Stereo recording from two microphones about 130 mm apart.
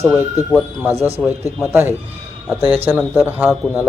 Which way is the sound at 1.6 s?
15° right (ahead or behind).